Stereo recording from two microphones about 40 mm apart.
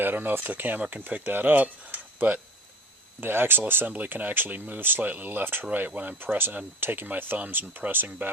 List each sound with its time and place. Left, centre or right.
0.0 s speech: right
3.2 s speech: right
3.8 s speech: right
5.9 s speech: right
6.2 s speech: right